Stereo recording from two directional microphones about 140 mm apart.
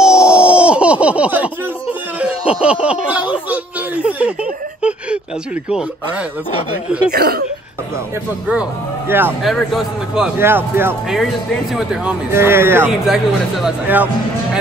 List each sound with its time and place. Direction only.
0.0 s a sound: 5° right (ahead or behind)
2.6 s speech: 10° right (ahead or behind)
3.4 s a sound: 10° right (ahead or behind)
5.7 s speech: 5° right (ahead or behind)
7.1 s speech: 90° right
8.5 s speech: 10° right (ahead or behind)
9.4 s a man's voice: centre (ahead or behind)
10.4 s speech: 15° right (ahead or behind)
11.7 s speech: 5° right (ahead or behind)
13.0 s a man's voice: centre (ahead or behind)